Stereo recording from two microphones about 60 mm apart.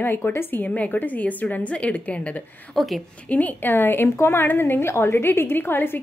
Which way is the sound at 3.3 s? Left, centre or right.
Left.